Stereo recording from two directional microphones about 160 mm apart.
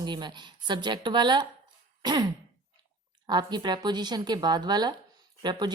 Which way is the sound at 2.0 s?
25° right (ahead or behind).